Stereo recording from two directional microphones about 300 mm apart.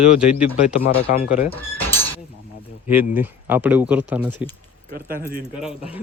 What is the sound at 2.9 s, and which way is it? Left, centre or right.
Speech, centre.